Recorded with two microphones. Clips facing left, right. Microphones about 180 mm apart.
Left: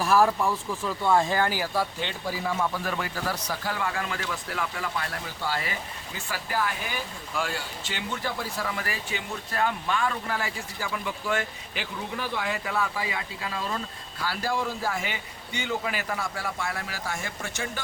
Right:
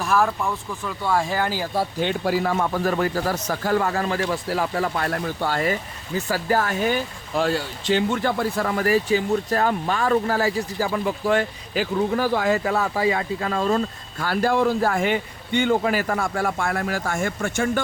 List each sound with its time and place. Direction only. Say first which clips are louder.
0.0 s speech: even; 5° left (ahead or behind)
1.3 s speech: right 2 dB; 15° right (ahead or behind)
2.2 s speech: right 4 dB; 70° right (ahead or behind); by 5.7 s 50° right (ahead or behind)
6.1 s speech: right 9 dB; 40° right (ahead or behind)
8.2 s speech: right 9 dB; 55° right (ahead or behind)